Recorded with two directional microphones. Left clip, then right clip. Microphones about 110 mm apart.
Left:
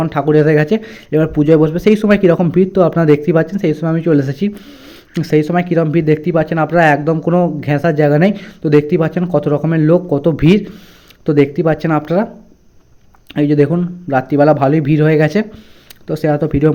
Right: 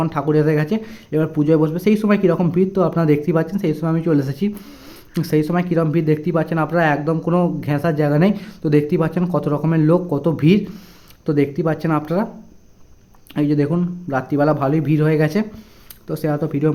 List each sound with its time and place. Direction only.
0.1 s speech: 30° left (ahead or behind)
4.6 s a sound: 10° left (ahead or behind)
5.1 s speech: 25° left (ahead or behind)
13.3 s speech: 30° left (ahead or behind)